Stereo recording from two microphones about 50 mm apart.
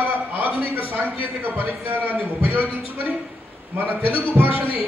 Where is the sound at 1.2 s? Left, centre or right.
Right.